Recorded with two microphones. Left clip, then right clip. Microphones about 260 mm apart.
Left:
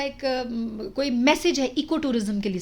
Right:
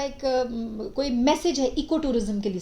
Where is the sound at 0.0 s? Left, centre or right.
Left.